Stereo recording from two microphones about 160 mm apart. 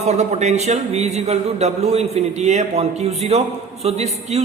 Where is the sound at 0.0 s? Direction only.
45° right (ahead or behind).